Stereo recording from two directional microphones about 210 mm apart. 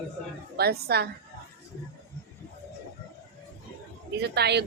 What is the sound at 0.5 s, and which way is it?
Speech, 50° right (ahead or behind).